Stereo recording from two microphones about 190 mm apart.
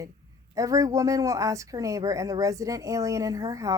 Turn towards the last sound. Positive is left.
turn(degrees=-15)  # may be behind; listen again after turning